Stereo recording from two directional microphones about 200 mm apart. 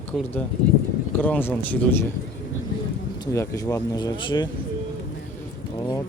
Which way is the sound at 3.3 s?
15° left (ahead or behind).